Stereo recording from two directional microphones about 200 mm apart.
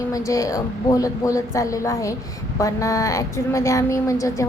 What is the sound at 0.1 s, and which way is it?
A woman's voice, 15° left (ahead or behind).